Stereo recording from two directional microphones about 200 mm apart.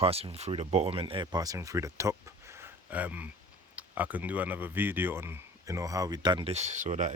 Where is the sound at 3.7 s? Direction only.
10° right (ahead or behind).